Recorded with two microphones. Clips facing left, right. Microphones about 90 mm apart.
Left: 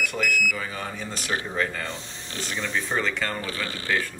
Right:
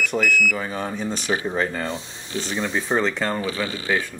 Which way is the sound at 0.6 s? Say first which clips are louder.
Right 5 dB; 25° right (ahead or behind).